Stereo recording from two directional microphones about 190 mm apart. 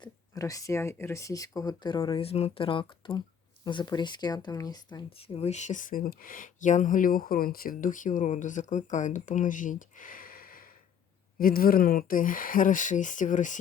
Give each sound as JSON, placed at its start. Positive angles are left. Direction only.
{"t": 0.0, "sound": "speech", "side_deg": 20}